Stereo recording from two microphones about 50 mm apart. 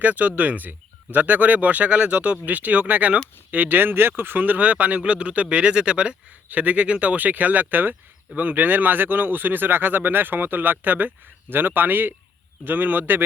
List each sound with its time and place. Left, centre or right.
0.0 s speech: right